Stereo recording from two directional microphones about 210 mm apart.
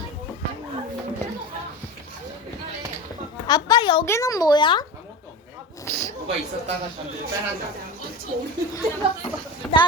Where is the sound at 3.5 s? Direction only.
20° left (ahead or behind).